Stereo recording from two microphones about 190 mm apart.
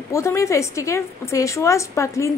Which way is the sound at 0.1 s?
15° left (ahead or behind).